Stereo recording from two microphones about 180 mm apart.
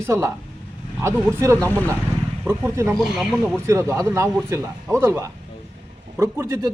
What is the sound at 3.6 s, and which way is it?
A man's voice, 15° right (ahead or behind).